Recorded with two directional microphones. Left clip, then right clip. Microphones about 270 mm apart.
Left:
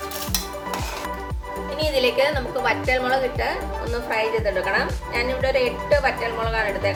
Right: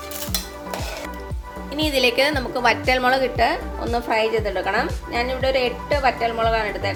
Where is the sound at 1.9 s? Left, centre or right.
Right.